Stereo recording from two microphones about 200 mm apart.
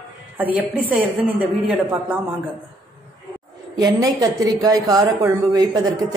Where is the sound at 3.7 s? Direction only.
20° right (ahead or behind).